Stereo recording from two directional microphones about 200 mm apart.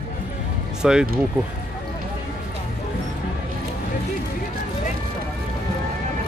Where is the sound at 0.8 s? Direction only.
5° right (ahead or behind).